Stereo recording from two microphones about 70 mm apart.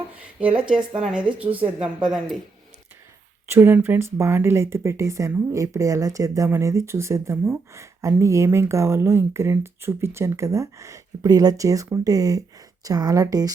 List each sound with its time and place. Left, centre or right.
0.2 s a woman's voice: centre
3.4 s speech: right